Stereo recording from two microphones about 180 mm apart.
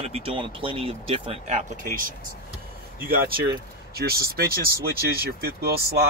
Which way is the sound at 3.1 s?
55° right (ahead or behind).